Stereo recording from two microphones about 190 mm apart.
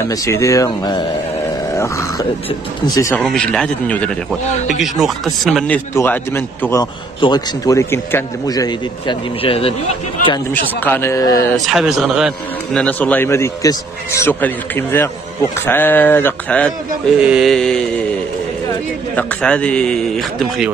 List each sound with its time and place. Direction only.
0.1 s a man's voice: 15° left (ahead or behind)
1.7 s grunt: 15° left (ahead or behind)
2.9 s a man's voice: 15° left (ahead or behind)
3.3 s a man's voice: 5° left (ahead or behind)
5.9 s a man's voice: 10° left (ahead or behind); by 9.8 s 30° left (ahead or behind)
10.5 s a man's voice: 10° left (ahead or behind)
11.5 s a man's voice: centre (ahead or behind)
12.8 s a man's voice: 10° left (ahead or behind)
17.2 s a man's voice: 5° right (ahead or behind)
19.1 s a man's voice: 5° left (ahead or behind)